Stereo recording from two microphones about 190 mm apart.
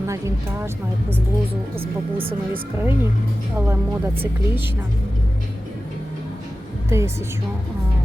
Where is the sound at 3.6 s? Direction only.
15° right (ahead or behind).